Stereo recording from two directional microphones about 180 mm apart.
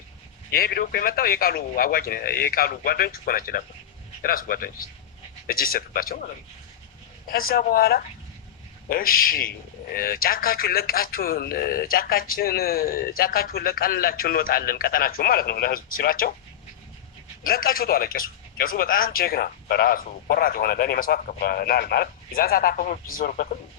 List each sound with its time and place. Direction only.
0.5 s speech: 55° left (ahead or behind)
7.3 s speech: 55° left (ahead or behind)
17.4 s speech: 55° left (ahead or behind)